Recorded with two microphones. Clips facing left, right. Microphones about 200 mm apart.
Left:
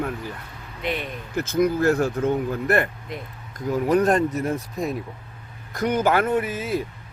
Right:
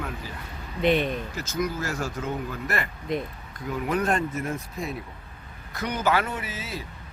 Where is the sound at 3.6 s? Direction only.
40° left (ahead or behind).